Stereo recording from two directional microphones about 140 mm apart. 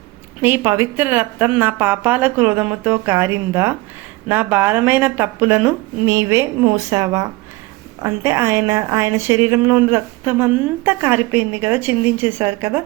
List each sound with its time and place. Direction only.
0.4 s a woman's voice: 15° right (ahead or behind)